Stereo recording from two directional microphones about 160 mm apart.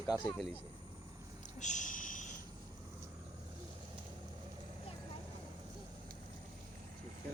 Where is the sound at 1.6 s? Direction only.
50° left (ahead or behind).